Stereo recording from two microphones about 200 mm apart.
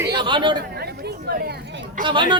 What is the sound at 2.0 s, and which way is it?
Speech, 25° right (ahead or behind).